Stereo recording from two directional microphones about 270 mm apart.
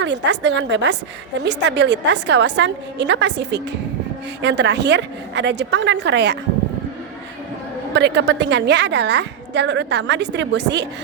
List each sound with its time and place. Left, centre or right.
0.0 s a woman's voice: right
7.9 s a woman's voice: right